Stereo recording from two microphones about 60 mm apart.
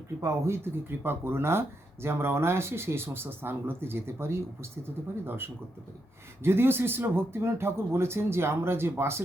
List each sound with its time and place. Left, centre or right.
0.2 s speech: right
6.4 s speech: right